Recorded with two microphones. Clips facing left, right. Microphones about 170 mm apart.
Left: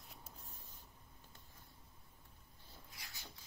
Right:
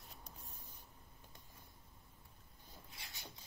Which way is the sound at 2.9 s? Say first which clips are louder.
Right 1 dB; 20° right (ahead or behind).